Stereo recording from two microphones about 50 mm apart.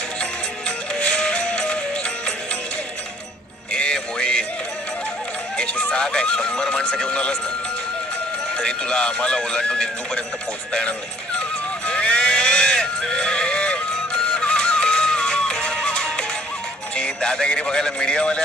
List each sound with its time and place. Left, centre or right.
0.9 s music: left
3.7 s music: centre
5.6 s speech: centre
8.5 s speech: centre
11.9 s music: left
16.9 s speech: centre